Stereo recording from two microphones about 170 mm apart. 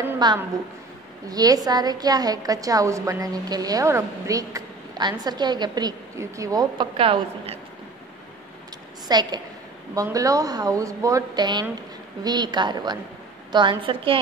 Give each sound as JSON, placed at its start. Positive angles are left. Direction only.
{"t": 0.2, "sound": "a woman's voice", "side_deg": -25}
{"t": 7.0, "sound": "a woman's voice", "side_deg": -35}
{"t": 9.0, "sound": "a woman's voice", "side_deg": -25}